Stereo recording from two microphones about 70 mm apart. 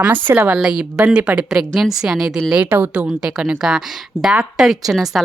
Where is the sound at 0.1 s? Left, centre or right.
Right.